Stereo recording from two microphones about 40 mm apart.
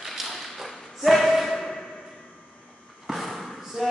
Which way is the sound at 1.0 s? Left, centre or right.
Centre.